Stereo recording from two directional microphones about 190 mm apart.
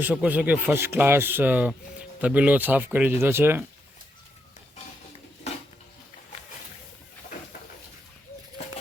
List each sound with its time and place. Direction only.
0.0 s speech: 5° right (ahead or behind)
5.5 s dishes: 35° left (ahead or behind)